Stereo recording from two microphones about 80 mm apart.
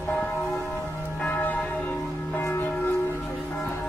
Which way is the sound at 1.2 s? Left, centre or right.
Left.